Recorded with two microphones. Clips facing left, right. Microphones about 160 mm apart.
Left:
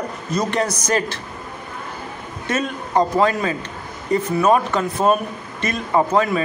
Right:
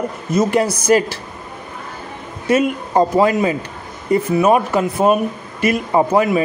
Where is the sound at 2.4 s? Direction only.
10° right (ahead or behind).